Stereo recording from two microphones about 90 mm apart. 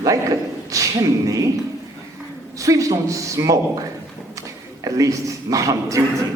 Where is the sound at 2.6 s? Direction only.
40° right (ahead or behind).